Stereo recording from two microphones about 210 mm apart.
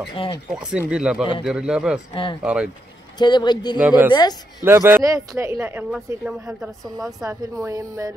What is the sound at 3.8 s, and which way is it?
A woman's voice, 10° right (ahead or behind).